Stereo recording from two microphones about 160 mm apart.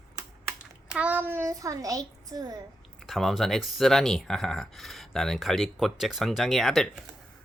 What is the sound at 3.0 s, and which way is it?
Speech, centre (ahead or behind).